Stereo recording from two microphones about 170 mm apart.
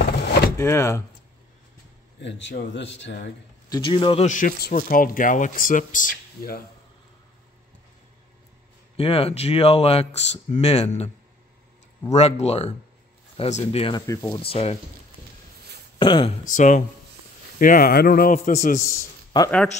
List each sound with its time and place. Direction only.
0.0 s a sound: 70° left (ahead or behind)
0.6 s speech: 15° left (ahead or behind)
2.1 s speech: 90° left
3.6 s speech: 25° left (ahead or behind)
4.3 s speech: 55° left (ahead or behind)
8.9 s speech: 35° left (ahead or behind)
12.1 s speech: 40° left (ahead or behind)
14.0 s speech: 20° left (ahead or behind)
14.3 s speech: 35° left (ahead or behind)
16.0 s speech: 30° left (ahead or behind)
16.5 s speech: 45° left (ahead or behind)